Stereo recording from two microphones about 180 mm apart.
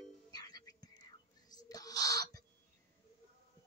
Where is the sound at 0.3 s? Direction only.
20° left (ahead or behind).